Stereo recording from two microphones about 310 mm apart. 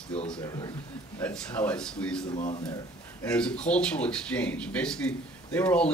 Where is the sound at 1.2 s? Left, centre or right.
Centre.